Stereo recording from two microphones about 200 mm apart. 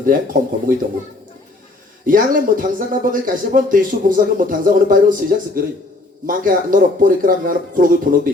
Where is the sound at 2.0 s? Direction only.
45° right (ahead or behind).